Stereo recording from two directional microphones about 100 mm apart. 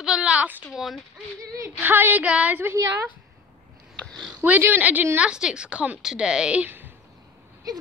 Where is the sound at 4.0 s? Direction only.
10° left (ahead or behind).